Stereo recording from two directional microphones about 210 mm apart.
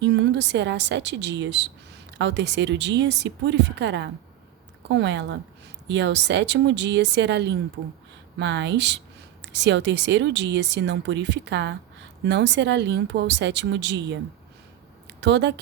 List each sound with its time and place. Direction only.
0.0 s speech: 55° right (ahead or behind)